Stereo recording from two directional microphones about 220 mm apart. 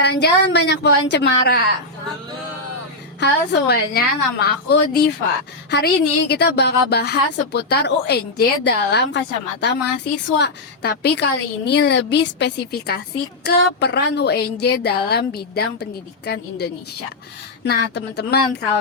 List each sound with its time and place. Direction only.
0.0 s a woman's voice: 50° left (ahead or behind)
3.2 s a woman's voice: 50° left (ahead or behind)